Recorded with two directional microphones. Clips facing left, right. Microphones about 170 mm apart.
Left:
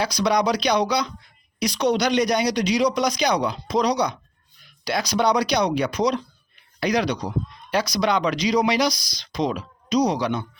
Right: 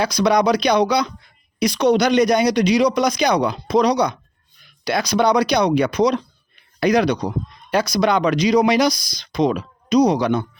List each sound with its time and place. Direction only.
0.0 s speech: 55° right (ahead or behind)